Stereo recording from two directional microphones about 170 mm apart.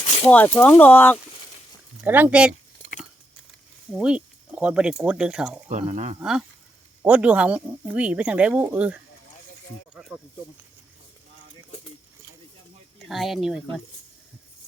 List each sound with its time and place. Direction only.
0.3 s speech: 10° left (ahead or behind)
2.0 s speech: 10° right (ahead or behind)
3.9 s speech: 5° right (ahead or behind)
5.6 s speech: 40° right (ahead or behind)
6.1 s speech: 5° right (ahead or behind)
13.0 s speech: centre (ahead or behind)